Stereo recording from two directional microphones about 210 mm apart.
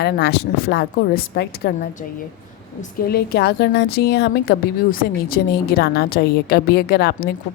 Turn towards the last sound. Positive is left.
turn(degrees=50)  # may be behind; listen again after turning